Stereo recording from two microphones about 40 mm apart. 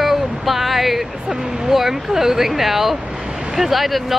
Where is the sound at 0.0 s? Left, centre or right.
Centre.